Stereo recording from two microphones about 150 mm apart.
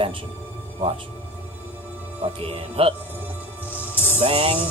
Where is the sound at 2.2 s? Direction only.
40° right (ahead or behind).